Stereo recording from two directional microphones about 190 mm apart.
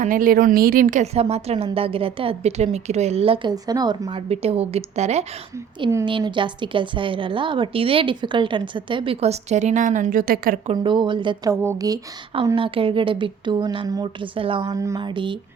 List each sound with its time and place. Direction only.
0.0 s a woman's voice: 45° right (ahead or behind)
10.7 s a woman's voice: 25° right (ahead or behind)
11.5 s speech: 15° right (ahead or behind)
12.5 s a woman's voice: 30° right (ahead or behind)